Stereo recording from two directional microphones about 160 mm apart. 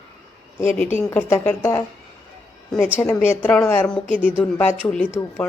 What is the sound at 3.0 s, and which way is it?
A woman's voice, 15° left (ahead or behind).